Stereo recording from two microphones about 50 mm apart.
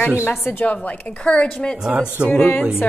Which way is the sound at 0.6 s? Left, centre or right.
Left.